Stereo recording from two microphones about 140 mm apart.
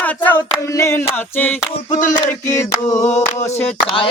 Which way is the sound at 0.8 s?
20° left (ahead or behind).